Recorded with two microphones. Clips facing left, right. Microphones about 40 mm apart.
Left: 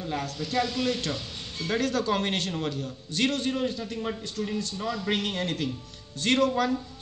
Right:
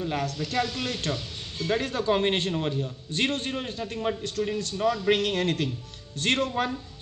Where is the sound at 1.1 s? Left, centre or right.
Centre; by 4.0 s right.